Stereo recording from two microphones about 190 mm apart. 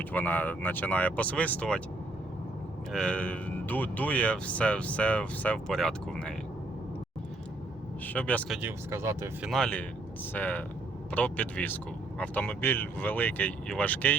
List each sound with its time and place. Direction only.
0.0 s speech: 10° left (ahead or behind)
2.9 s speech: 5° left (ahead or behind)
8.0 s speech: 10° left (ahead or behind)
8.5 s speech: 10° right (ahead or behind)
9.5 s speech: 5° left (ahead or behind)